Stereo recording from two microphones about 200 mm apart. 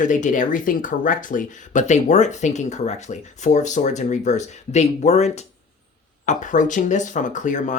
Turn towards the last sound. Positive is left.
turn(degrees=40)  # may be behind; listen again after turning